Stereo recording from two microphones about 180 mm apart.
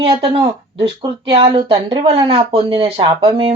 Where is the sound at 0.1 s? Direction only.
30° right (ahead or behind).